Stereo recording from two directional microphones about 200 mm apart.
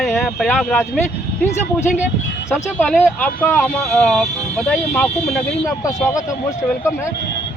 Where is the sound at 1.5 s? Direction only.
35° left (ahead or behind).